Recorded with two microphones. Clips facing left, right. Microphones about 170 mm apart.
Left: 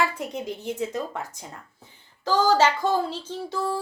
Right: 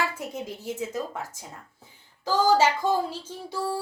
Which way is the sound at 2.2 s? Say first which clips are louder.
Left 1 dB; 10° right (ahead or behind).